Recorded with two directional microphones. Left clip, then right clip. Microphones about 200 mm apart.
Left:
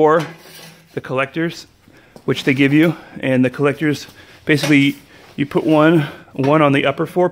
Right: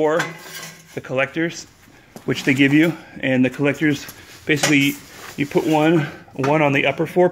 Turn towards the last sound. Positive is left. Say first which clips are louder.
# even
turn(degrees=20)  # may be behind; listen again after turning